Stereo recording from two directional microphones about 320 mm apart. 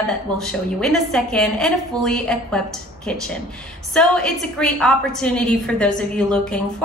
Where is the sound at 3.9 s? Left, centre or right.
Centre.